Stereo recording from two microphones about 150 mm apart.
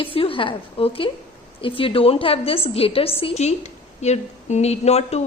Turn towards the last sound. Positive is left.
turn(degrees=45)  # may be behind; listen again after turning